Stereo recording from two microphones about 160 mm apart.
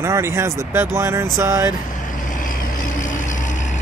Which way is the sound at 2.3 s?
55° left (ahead or behind).